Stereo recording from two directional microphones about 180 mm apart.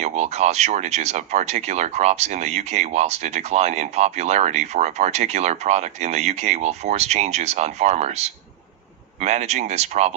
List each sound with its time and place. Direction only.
0.0 s speech: 40° right (ahead or behind)